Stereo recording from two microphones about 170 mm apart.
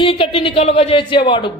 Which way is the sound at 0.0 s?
30° left (ahead or behind).